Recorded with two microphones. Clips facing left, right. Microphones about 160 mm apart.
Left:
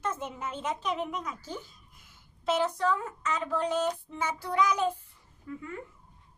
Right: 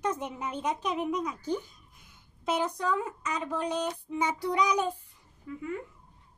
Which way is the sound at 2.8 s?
15° right (ahead or behind).